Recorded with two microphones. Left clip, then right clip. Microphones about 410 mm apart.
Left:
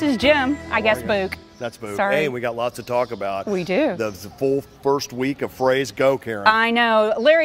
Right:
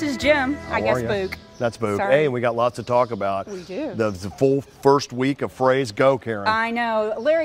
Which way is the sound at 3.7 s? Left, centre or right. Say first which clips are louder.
Left 10 dB; left.